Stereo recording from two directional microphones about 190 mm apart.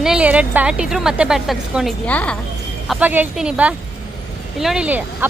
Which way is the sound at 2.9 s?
5° right (ahead or behind).